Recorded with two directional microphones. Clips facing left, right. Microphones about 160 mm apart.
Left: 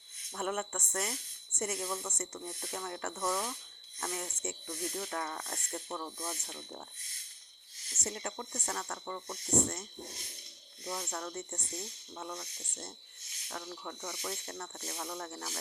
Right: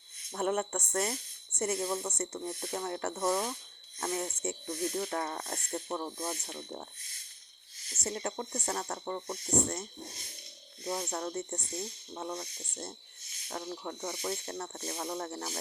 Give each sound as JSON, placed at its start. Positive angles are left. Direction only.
{"t": 0.3, "sound": "speech", "side_deg": -30}
{"t": 8.0, "sound": "speech", "side_deg": -35}
{"t": 10.8, "sound": "speech", "side_deg": -30}